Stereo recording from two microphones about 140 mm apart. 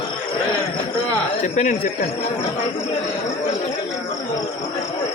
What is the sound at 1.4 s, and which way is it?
Speech, 60° left (ahead or behind).